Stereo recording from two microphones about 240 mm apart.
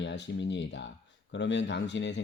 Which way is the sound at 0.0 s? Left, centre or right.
Left.